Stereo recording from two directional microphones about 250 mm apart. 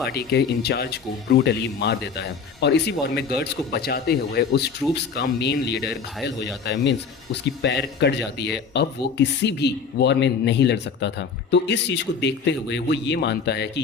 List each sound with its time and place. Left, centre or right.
0.1 s speech: left